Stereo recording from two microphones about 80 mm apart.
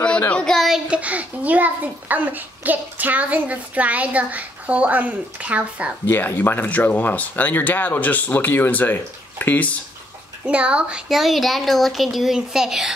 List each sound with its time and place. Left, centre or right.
0.3 s speech: centre
0.6 s a sound: centre
0.8 s a child's voice: centre
6.0 s speech: left
10.4 s a woman's voice: centre